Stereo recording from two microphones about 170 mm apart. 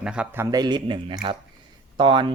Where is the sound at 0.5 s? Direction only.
25° right (ahead or behind).